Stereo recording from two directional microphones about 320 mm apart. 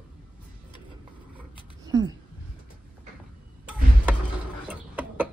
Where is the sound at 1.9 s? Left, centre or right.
Centre.